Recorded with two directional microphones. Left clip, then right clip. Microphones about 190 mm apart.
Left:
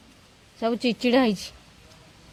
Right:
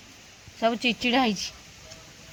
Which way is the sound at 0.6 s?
60° left (ahead or behind).